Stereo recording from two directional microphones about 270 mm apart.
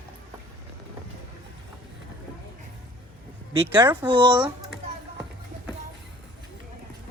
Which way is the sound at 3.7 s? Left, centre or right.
Centre.